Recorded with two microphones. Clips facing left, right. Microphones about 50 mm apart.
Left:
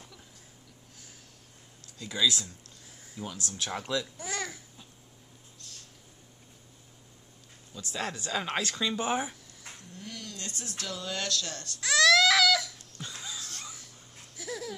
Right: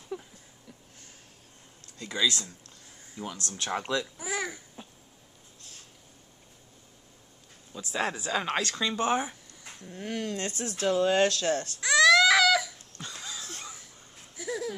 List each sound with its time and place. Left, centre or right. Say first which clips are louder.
0.1 s a sound: right 15 dB; right
2.0 s speech: even; centre
7.8 s speech: right 5 dB; centre
8.7 s speech: right 3 dB; centre
9.8 s speech: right 11 dB; right
11.8 s baby cry: right 2 dB; centre
13.0 s music: right 1 dB; centre
14.3 s a sound: right 5 dB; centre